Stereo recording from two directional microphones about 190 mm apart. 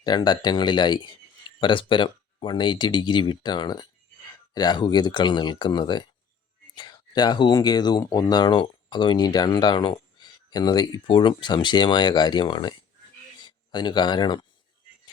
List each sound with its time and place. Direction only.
0.0 s speech: 20° left (ahead or behind)